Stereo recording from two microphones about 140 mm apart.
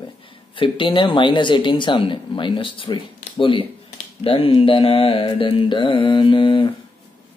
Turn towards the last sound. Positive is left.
turn(degrees=35)  # may be behind; listen again after turning